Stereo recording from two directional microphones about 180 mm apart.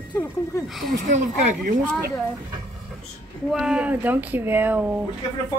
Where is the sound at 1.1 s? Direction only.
40° right (ahead or behind).